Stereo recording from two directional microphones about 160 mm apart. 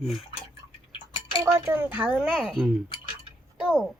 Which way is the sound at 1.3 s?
15° right (ahead or behind).